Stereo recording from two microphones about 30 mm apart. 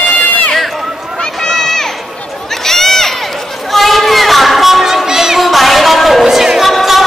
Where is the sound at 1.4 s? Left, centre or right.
Centre.